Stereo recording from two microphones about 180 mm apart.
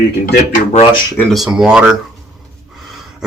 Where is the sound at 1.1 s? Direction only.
Centre (ahead or behind).